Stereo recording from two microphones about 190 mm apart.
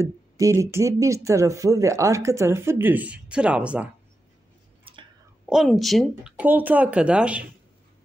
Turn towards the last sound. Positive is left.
turn(degrees=-5)  # may be behind; listen again after turning